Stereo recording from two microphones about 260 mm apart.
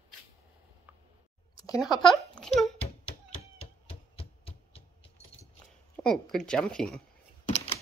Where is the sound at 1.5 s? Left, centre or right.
Centre.